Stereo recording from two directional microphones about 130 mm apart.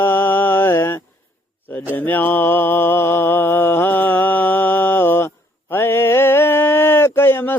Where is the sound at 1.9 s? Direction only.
15° left (ahead or behind).